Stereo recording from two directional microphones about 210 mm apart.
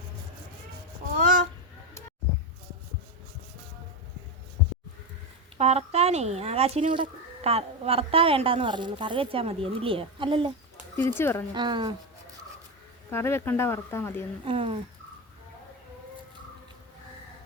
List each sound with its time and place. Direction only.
1.2 s a sound: 40° right (ahead or behind)
5.5 s speech: 30° right (ahead or behind)
10.9 s speech: 10° left (ahead or behind)
11.5 s speech: 20° right (ahead or behind)
13.1 s speech: 10° left (ahead or behind)
14.4 s speech: 25° right (ahead or behind)